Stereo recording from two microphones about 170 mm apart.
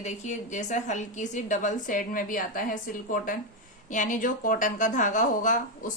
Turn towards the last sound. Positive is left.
turn(degrees=50)  # may be behind; listen again after turning